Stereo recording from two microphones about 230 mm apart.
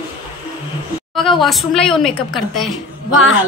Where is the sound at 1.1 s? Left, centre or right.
Centre.